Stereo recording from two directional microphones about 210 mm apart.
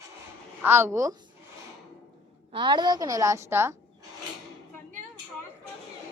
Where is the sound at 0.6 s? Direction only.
10° right (ahead or behind).